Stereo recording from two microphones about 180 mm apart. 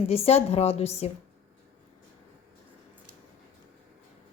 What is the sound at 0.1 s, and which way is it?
A woman's voice, 35° left (ahead or behind).